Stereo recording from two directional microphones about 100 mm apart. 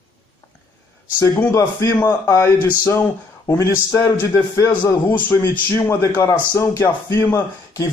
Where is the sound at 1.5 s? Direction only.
30° left (ahead or behind).